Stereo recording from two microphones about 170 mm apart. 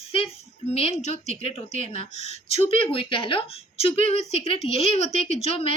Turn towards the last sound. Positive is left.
turn(degrees=35)  # may be behind; listen again after turning